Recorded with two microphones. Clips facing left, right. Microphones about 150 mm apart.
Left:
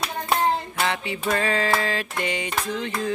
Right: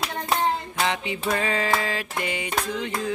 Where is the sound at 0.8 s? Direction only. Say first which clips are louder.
Right 2 dB; 15° right (ahead or behind).